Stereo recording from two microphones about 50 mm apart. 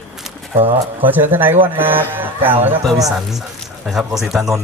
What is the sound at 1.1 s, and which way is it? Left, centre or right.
Speech, right.